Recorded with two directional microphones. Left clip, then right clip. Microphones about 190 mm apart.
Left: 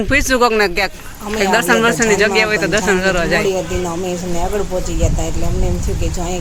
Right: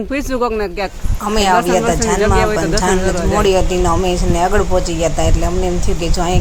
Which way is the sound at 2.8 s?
10° right (ahead or behind).